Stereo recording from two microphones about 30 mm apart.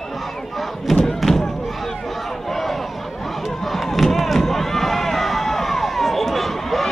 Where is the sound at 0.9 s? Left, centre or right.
Centre.